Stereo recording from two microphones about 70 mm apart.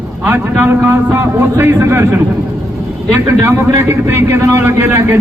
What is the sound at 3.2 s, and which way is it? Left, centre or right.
Speech, right.